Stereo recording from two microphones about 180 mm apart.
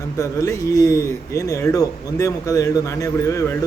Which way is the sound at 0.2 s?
15° left (ahead or behind).